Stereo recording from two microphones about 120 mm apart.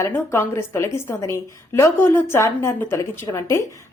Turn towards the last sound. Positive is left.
turn(degrees=25)  # may be behind; listen again after turning